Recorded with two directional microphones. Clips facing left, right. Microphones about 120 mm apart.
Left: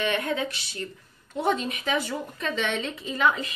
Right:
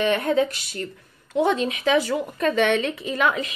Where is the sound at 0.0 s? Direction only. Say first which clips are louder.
Right 6 dB; 35° right (ahead or behind).